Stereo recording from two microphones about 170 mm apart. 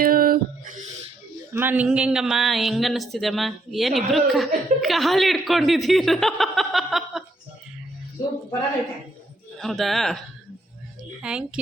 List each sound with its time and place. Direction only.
0.0 s music: 60° right (ahead or behind)
1.5 s speech: 10° right (ahead or behind)
9.6 s speech: centre (ahead or behind)